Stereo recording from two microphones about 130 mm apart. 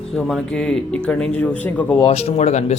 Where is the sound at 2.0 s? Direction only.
55° left (ahead or behind).